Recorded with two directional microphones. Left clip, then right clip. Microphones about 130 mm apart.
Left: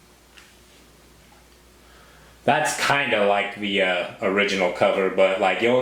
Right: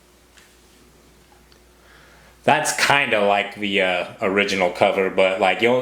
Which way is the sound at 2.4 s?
35° right (ahead or behind).